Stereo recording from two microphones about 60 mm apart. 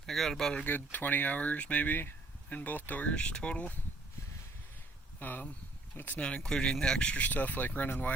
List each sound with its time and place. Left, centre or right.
0.0 s speech: centre
0.6 s speech: left
5.2 s speech: left
6.2 s speech: centre; by 8.1 s left